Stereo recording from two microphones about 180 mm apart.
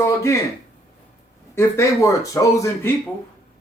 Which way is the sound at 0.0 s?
15° left (ahead or behind).